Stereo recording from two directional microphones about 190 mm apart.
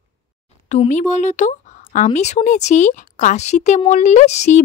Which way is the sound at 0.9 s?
40° left (ahead or behind).